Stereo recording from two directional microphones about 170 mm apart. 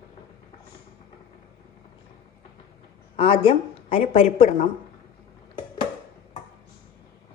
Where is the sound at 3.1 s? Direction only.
35° left (ahead or behind).